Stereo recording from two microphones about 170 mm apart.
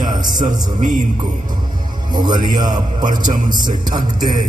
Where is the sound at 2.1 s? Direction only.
25° right (ahead or behind).